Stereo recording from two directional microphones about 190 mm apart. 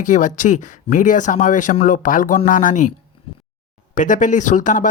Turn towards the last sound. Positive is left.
turn(degrees=45)  # may be behind; listen again after turning